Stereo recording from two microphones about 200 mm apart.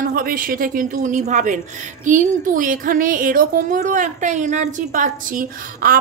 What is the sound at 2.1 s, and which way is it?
Speech, 40° right (ahead or behind).